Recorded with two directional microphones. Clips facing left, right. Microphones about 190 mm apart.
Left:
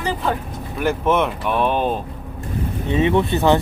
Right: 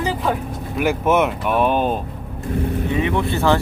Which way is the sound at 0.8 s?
10° right (ahead or behind).